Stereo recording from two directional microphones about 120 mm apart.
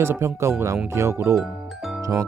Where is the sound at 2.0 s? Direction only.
25° right (ahead or behind).